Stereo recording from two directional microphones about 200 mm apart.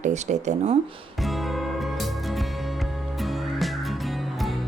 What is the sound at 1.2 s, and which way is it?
Music, centre (ahead or behind).